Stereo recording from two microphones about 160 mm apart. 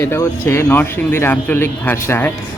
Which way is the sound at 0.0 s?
15° left (ahead or behind).